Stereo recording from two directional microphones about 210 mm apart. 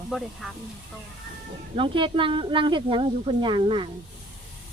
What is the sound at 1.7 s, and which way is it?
Speech, 25° right (ahead or behind).